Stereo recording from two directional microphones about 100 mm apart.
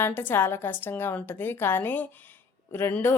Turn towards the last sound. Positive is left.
turn(degrees=20)  # may be behind; listen again after turning